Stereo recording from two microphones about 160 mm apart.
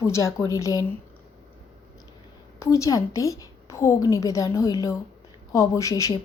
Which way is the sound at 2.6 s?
20° left (ahead or behind).